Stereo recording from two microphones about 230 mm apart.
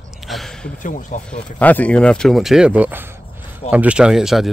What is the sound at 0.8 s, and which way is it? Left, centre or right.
Speech, left.